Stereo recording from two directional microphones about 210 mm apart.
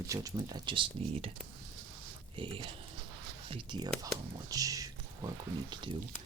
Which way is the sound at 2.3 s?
25° right (ahead or behind).